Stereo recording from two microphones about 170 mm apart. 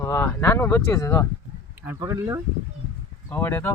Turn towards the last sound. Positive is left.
turn(degrees=15)  # may be behind; listen again after turning